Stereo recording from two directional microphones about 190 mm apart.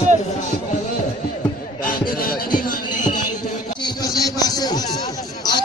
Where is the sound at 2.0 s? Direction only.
50° left (ahead or behind).